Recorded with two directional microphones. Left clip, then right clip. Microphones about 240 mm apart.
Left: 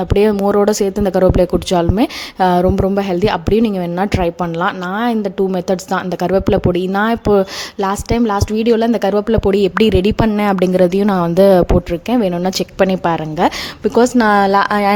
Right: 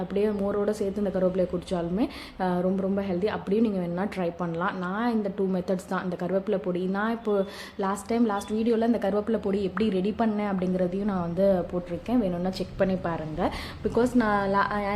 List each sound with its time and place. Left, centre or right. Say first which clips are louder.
0.1 s a woman's voice: left 14 dB; left